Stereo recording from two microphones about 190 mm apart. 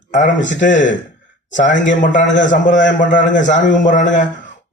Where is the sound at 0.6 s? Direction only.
40° left (ahead or behind).